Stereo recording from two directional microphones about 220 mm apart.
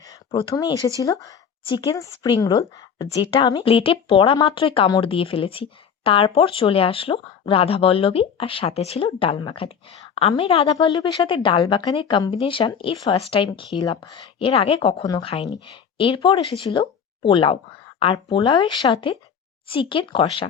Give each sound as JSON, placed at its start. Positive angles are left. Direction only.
{"t": 0.0, "sound": "speech", "side_deg": 20}